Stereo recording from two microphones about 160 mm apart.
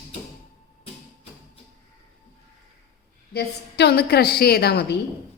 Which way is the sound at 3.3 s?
90° left.